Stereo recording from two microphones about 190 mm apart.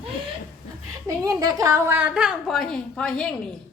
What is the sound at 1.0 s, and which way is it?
A woman's voice, 20° right (ahead or behind).